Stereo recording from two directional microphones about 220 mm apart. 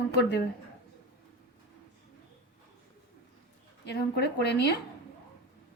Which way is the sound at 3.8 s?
50° left (ahead or behind).